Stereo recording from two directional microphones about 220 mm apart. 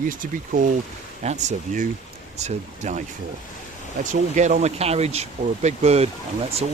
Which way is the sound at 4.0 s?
35° right (ahead or behind).